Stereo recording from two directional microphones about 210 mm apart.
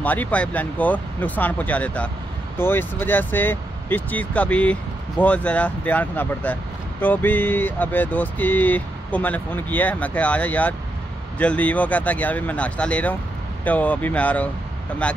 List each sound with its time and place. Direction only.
0.0 s speech: 10° left (ahead or behind)